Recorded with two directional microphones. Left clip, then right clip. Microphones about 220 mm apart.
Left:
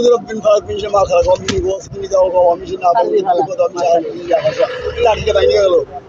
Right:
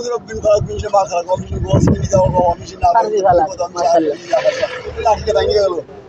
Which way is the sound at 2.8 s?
35° right (ahead or behind).